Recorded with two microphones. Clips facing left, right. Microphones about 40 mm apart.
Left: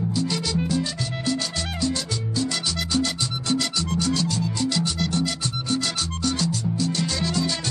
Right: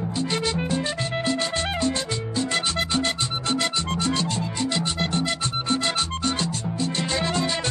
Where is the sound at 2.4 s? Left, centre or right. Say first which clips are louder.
Right 3 dB; right.